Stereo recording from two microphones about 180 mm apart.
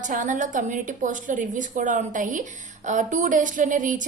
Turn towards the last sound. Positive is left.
turn(degrees=-45)  # may be behind; listen again after turning